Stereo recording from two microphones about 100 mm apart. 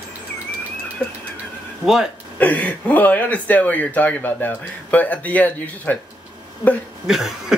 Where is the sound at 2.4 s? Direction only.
15° left (ahead or behind).